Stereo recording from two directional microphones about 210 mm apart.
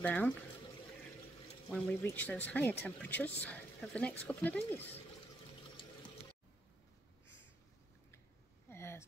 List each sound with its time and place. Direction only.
0.0 s speech: 5° left (ahead or behind)
1.7 s speech: 10° left (ahead or behind)
5.8 s water: 25° left (ahead or behind)
8.6 s a sound: 10° left (ahead or behind)